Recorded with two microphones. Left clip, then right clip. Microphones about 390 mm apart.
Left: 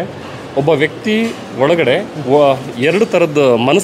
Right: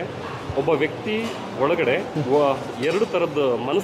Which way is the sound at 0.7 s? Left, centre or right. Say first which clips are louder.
Left 9 dB; left.